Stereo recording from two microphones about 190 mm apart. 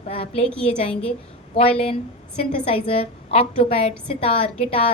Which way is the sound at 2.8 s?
30° left (ahead or behind).